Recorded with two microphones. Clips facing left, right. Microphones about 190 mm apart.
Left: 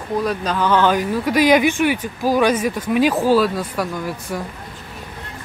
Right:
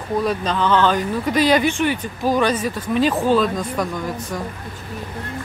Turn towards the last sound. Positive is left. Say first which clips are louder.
# even
turn(degrees=5)  # may be behind; listen again after turning